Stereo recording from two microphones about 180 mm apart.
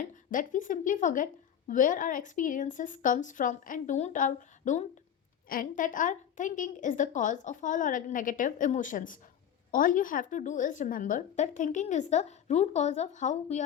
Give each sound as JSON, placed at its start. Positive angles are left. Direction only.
{"t": 0.3, "sound": "a woman's voice", "side_deg": 45}